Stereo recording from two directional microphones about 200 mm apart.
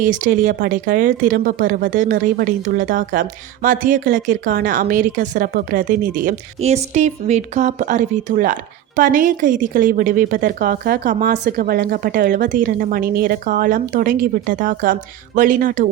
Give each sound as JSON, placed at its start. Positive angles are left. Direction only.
{"t": 0.0, "sound": "a woman's voice", "side_deg": -40}